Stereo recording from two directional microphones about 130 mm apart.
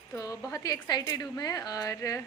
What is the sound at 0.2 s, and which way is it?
A woman's voice, 25° left (ahead or behind).